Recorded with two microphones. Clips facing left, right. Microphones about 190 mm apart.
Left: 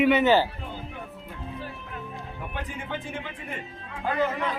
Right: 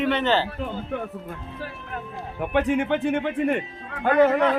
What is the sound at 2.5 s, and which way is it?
A man's voice, 70° right (ahead or behind).